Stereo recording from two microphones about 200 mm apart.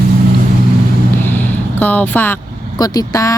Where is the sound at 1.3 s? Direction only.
10° left (ahead or behind).